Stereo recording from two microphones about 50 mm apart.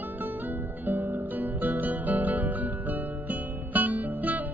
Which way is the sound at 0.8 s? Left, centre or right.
Right.